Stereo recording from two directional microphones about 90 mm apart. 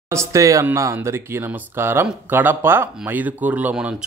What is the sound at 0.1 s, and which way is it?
Speech, 35° right (ahead or behind).